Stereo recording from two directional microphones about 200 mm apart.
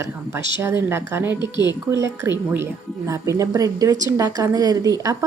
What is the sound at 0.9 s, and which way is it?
Speech, 10° right (ahead or behind).